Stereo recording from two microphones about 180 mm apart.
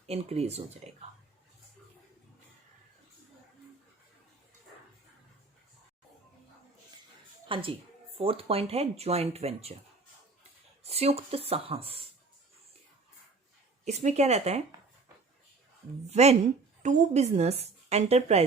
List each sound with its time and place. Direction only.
0.1 s a woman's voice: 35° right (ahead or behind)
7.4 s a woman's voice: 30° right (ahead or behind)
10.8 s a woman's voice: 35° right (ahead or behind)
13.8 s a woman's voice: 40° right (ahead or behind)
16.0 s a woman's voice: 35° right (ahead or behind)